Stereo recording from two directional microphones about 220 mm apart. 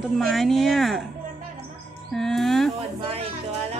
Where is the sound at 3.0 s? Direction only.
25° right (ahead or behind).